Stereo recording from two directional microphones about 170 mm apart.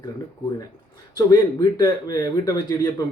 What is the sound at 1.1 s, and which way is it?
Speech, 25° left (ahead or behind).